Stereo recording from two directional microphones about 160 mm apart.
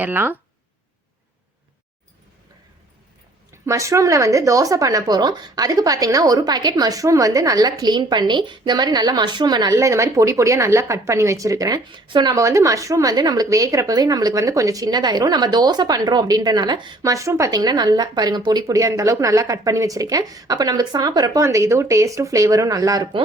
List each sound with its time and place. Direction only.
0.0 s speech: 10° right (ahead or behind)
3.7 s speech: 20° right (ahead or behind)